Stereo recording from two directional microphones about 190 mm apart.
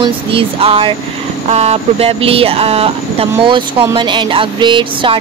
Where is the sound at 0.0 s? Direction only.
30° right (ahead or behind).